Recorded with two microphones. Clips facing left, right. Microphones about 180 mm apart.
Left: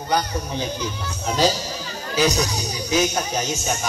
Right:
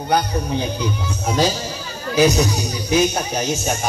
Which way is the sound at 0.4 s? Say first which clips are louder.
Right 4 dB; 60° right (ahead or behind).